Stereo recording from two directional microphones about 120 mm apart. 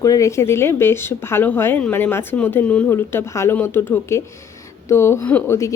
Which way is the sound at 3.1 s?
20° left (ahead or behind).